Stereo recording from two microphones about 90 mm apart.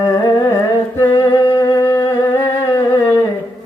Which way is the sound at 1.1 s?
45° left (ahead or behind).